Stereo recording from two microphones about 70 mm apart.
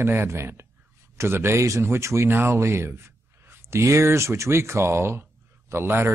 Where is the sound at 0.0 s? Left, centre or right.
Right.